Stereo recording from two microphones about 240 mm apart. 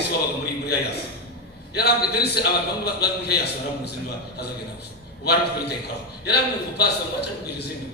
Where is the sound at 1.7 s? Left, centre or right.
Left.